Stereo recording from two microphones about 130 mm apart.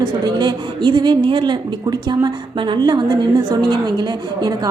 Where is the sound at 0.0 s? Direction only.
35° right (ahead or behind).